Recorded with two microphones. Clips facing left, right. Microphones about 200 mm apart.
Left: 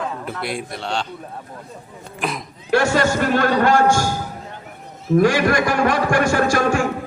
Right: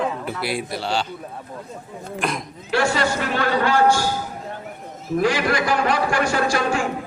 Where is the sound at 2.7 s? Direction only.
45° left (ahead or behind).